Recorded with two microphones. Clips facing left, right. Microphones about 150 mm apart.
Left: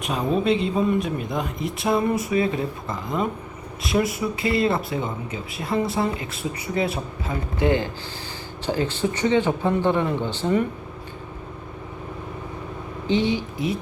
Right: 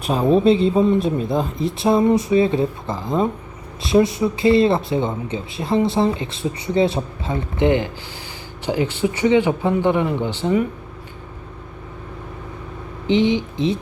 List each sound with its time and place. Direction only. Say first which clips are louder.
0.0 s speech: right 7 dB; 30° right (ahead or behind); by 10.7 s 10° right (ahead or behind)
13.1 s speech: right 5 dB; 20° right (ahead or behind)